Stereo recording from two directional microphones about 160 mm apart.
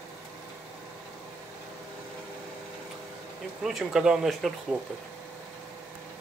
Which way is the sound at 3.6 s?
Centre (ahead or behind).